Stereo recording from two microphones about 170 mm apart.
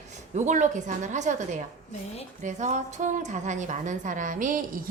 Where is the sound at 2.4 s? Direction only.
45° right (ahead or behind).